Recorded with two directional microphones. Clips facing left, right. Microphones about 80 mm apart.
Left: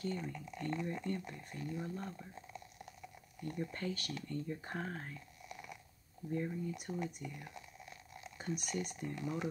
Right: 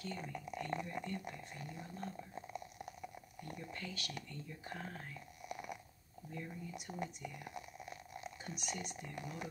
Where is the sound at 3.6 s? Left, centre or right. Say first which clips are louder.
Left 8 dB; left.